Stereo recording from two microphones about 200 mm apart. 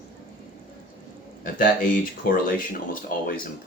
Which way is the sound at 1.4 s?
45° left (ahead or behind).